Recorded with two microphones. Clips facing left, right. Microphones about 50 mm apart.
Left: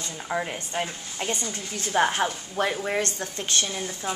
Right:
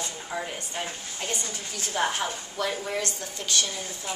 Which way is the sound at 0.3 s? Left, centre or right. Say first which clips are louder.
Left 6 dB; left.